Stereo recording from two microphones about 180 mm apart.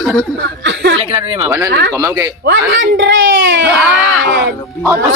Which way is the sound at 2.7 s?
85° right.